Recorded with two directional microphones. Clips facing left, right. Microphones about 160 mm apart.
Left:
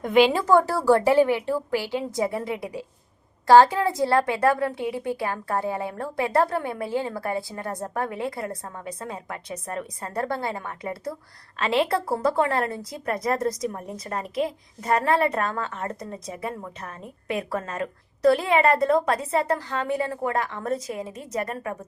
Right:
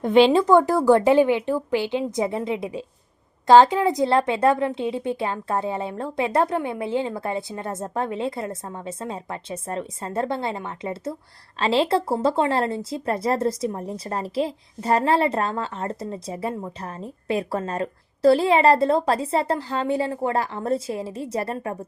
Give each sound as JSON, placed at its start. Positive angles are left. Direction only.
{"t": 0.0, "sound": "speech", "side_deg": -30}